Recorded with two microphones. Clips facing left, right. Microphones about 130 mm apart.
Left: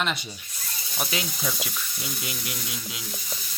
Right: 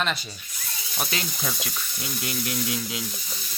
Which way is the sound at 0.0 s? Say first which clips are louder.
Right 1 dB; 15° left (ahead or behind).